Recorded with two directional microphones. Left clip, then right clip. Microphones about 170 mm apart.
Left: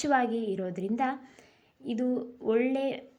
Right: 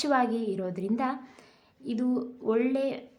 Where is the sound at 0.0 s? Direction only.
15° left (ahead or behind).